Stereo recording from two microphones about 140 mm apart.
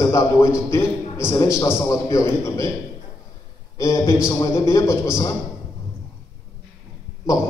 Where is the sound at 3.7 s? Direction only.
20° left (ahead or behind).